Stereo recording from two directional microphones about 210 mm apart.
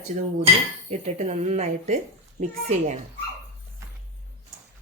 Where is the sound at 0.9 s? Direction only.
35° right (ahead or behind).